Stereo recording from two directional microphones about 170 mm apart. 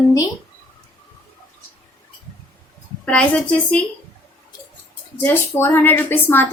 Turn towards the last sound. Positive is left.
turn(degrees=10)  # may be behind; listen again after turning